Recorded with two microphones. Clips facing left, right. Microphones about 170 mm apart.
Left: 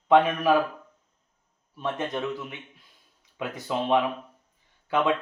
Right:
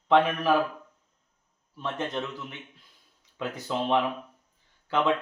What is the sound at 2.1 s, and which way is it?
A man's voice, 15° left (ahead or behind).